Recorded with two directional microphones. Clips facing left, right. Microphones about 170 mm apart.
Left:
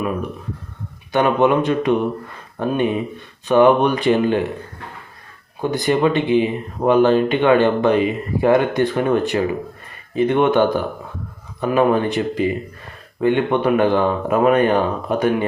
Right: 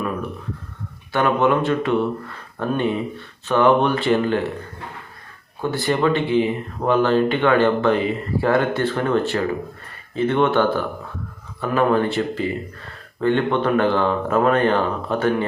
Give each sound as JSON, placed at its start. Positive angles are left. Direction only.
{"t": 1.1, "sound": "speech", "side_deg": 20}
{"t": 5.7, "sound": "speech", "side_deg": 15}